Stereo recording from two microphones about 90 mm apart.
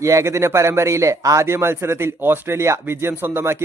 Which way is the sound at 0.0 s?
35° right (ahead or behind).